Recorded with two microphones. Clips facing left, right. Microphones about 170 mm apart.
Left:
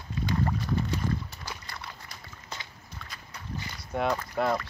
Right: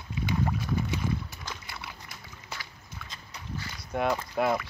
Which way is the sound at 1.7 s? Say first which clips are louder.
Even; 5° right (ahead or behind).